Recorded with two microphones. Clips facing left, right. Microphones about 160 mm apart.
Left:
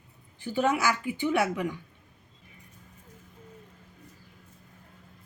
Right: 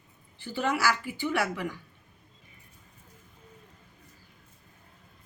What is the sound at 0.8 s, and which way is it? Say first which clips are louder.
Speech: left 1 dB; 20° left (ahead or behind).